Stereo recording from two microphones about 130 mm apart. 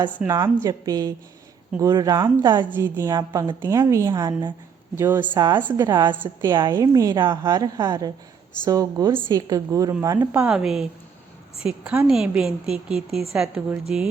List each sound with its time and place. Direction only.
0.3 s a woman's voice: 20° right (ahead or behind)
2.4 s a woman's voice: 35° right (ahead or behind)
2.7 s a woman's voice: 15° right (ahead or behind); by 4.5 s 35° right (ahead or behind)
4.9 s a woman's voice: 15° right (ahead or behind)
10.4 s a woman's voice: 5° right (ahead or behind)